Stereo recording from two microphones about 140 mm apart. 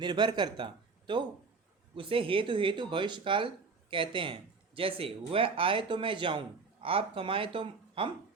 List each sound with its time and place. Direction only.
0.0 s speech: 30° right (ahead or behind)